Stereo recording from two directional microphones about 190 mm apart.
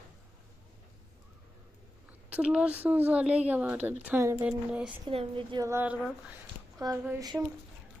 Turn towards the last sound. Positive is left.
turn(degrees=-20)  # may be behind; listen again after turning